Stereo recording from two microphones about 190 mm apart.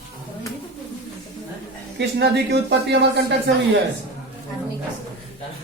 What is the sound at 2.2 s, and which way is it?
Speech, 65° right (ahead or behind).